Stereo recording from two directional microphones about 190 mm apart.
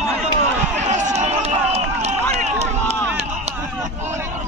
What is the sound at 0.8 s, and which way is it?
Run, 40° right (ahead or behind).